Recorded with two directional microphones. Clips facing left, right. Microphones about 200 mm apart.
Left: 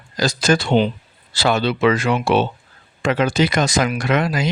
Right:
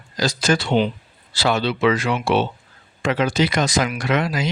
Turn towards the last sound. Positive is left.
turn(degrees=50)  # may be behind; listen again after turning